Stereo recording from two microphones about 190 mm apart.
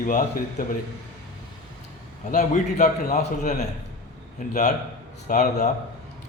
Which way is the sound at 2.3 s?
40° left (ahead or behind).